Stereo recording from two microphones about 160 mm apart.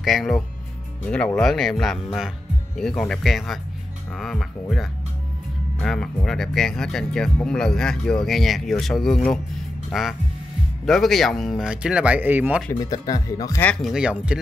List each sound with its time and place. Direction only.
0.0 s speech: centre (ahead or behind)
12.8 s speech: 25° left (ahead or behind)
13.6 s speech: 10° left (ahead or behind)
13.8 s speech: 5° right (ahead or behind)